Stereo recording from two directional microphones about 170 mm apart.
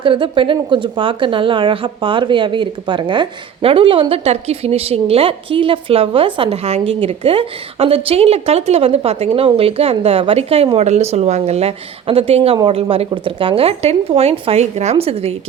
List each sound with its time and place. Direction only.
0.0 s a woman's voice: 30° right (ahead or behind)